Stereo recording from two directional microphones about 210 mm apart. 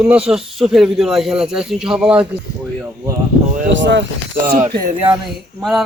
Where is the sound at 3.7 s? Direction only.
60° right (ahead or behind).